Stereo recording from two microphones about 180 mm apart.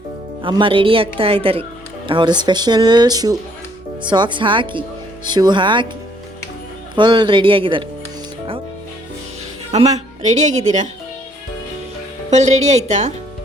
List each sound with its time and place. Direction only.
0.4 s a woman's voice: 25° right (ahead or behind)
6.9 s speech: 25° right (ahead or behind)
9.7 s a woman's voice: 40° right (ahead or behind)
12.3 s a woman's voice: 40° right (ahead or behind)